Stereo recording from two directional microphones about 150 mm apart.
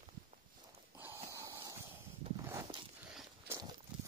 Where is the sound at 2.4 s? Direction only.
20° right (ahead or behind).